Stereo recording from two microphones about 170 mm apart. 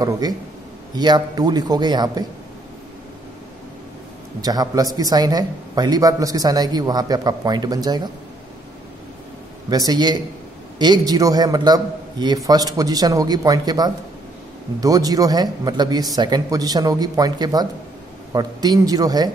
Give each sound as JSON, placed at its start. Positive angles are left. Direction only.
{"t": 0.0, "sound": "a man's voice", "side_deg": -25}
{"t": 4.4, "sound": "a man's voice", "side_deg": -20}
{"t": 9.7, "sound": "a man's voice", "side_deg": -25}